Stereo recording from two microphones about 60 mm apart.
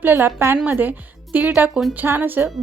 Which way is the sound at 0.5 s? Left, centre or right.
Right.